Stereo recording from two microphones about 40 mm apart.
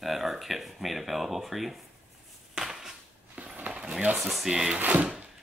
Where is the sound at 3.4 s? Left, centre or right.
Right.